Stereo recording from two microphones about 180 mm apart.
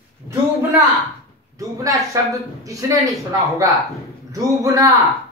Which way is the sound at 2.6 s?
20° right (ahead or behind).